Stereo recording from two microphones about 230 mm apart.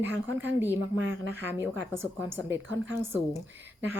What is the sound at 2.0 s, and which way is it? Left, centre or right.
Speech, centre.